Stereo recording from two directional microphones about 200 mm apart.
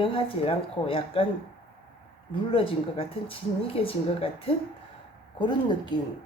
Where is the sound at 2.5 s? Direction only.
25° left (ahead or behind).